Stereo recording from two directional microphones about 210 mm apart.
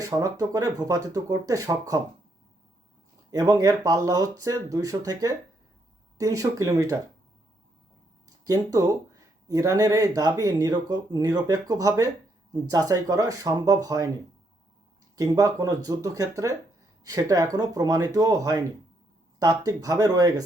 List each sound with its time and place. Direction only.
0.0 s speech: 15° right (ahead or behind)
3.3 s speech: 15° right (ahead or behind)
8.4 s speech: 15° right (ahead or behind)
15.1 s speech: 15° right (ahead or behind)